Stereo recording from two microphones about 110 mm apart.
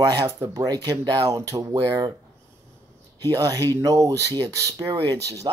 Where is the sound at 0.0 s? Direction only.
35° right (ahead or behind).